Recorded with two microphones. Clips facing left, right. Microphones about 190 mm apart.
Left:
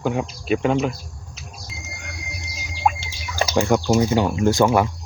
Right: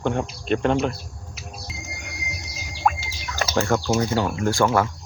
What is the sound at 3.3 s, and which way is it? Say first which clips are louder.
Speech: left 3 dB; 10° left (ahead or behind).